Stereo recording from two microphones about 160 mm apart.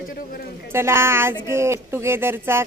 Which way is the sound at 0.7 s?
15° right (ahead or behind).